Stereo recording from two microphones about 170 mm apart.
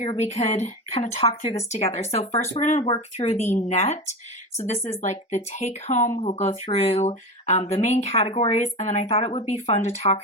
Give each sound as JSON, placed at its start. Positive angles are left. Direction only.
{"t": 0.0, "sound": "speech", "side_deg": 40}
{"t": 2.8, "sound": "speech", "side_deg": 35}